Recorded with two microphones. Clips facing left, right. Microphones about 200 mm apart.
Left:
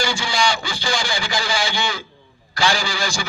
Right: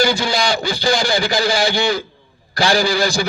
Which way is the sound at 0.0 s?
40° right (ahead or behind).